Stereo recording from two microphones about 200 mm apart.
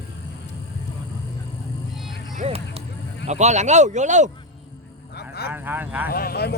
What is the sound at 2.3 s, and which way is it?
Speech, 30° right (ahead or behind).